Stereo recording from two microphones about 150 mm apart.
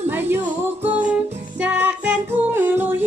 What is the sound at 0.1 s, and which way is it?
Music, 15° right (ahead or behind).